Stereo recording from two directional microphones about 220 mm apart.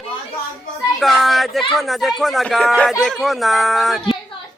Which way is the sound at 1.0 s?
Centre (ahead or behind).